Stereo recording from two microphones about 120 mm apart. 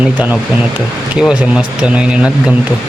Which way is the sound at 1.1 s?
10° right (ahead or behind).